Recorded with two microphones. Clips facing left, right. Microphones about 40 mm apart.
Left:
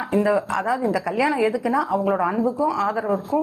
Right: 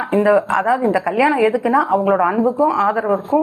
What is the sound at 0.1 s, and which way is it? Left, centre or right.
A woman's voice, right.